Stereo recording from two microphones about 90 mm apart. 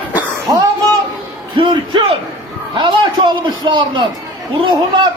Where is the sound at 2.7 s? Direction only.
65° right (ahead or behind).